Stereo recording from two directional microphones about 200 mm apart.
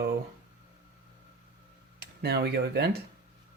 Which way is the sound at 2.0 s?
55° right (ahead or behind).